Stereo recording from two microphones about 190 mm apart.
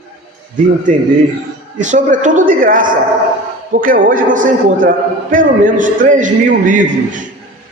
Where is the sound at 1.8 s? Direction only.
40° right (ahead or behind).